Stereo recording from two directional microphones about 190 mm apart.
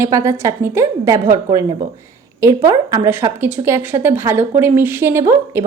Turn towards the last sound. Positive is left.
turn(degrees=-15)  # may be behind; listen again after turning